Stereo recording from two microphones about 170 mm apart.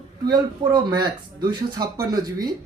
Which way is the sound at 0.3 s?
25° right (ahead or behind).